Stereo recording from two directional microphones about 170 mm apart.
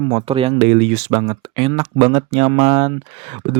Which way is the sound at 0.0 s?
30° right (ahead or behind).